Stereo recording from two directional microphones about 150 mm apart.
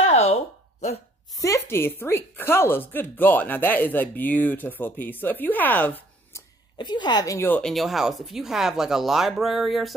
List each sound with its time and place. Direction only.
0.0 s a sound: 45° left (ahead or behind)
1.3 s a woman's voice: 20° left (ahead or behind)
6.8 s a woman's voice: 30° left (ahead or behind); by 9.9 s centre (ahead or behind)